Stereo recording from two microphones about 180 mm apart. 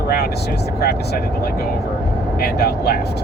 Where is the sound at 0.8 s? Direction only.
60° left (ahead or behind).